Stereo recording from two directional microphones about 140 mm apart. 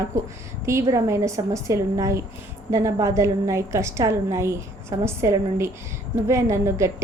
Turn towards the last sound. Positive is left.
turn(degrees=-20)  # may be behind; listen again after turning